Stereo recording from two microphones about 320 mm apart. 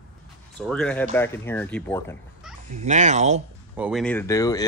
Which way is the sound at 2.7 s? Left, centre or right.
Right.